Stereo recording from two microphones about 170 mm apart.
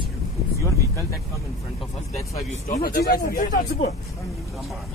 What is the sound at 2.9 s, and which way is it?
Speech, 65° left (ahead or behind).